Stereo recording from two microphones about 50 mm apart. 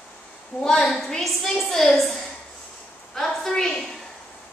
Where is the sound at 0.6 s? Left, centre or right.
Centre.